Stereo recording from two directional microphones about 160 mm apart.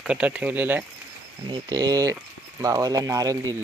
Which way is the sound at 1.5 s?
25° right (ahead or behind).